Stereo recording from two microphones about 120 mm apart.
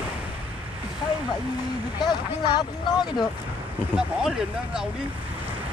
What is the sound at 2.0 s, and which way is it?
Speech, 35° left (ahead or behind).